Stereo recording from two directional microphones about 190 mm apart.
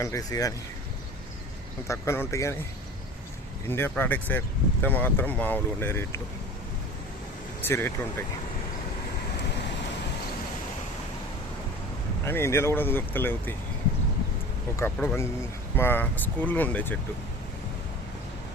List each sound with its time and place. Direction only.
0.0 s speech: 20° left (ahead or behind)
1.9 s speech: 15° left (ahead or behind)
3.7 s speech: 10° left (ahead or behind)
7.6 s speech: 10° left (ahead or behind)
12.2 s speech: 15° left (ahead or behind)
14.8 s speech: 10° left (ahead or behind)